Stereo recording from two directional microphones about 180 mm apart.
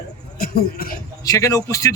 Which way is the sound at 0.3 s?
55° left (ahead or behind).